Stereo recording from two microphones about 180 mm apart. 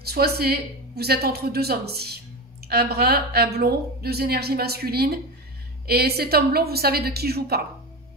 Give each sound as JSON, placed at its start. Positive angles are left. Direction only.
{"t": 0.0, "sound": "a woman's voice", "side_deg": -60}